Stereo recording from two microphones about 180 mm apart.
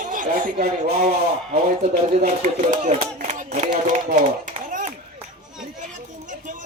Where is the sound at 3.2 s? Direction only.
40° right (ahead or behind).